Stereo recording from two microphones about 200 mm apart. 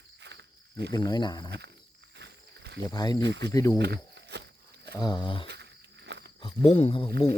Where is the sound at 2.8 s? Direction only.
20° left (ahead or behind).